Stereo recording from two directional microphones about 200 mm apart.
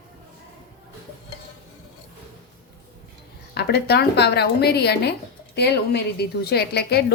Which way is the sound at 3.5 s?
55° left (ahead or behind).